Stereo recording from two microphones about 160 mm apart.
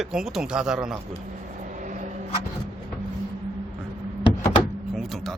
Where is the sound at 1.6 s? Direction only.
50° right (ahead or behind).